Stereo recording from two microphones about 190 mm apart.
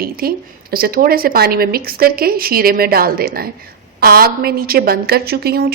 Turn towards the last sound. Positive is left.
turn(degrees=-55)  # may be behind; listen again after turning